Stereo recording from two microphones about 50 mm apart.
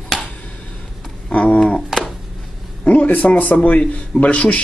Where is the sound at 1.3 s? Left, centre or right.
Left.